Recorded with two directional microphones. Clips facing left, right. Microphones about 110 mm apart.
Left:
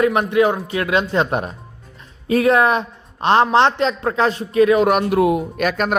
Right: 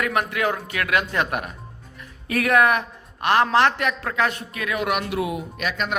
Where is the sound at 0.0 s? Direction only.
20° left (ahead or behind).